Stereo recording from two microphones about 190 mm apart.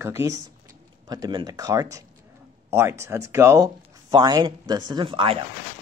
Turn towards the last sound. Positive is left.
turn(degrees=-25)  # may be behind; listen again after turning